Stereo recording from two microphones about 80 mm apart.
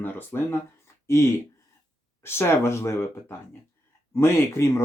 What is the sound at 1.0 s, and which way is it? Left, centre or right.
Speech, left.